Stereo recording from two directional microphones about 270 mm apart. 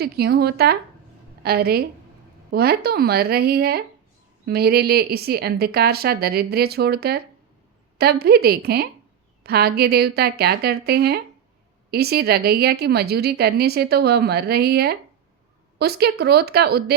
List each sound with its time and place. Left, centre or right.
0.0 s a woman's voice: right